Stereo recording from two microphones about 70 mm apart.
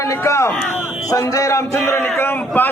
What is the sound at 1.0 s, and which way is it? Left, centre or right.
Speech, left.